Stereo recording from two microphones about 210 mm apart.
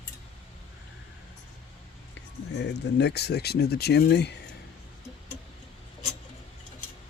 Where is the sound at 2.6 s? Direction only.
55° left (ahead or behind).